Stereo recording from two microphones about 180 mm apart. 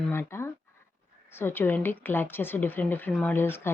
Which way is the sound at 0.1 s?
15° left (ahead or behind).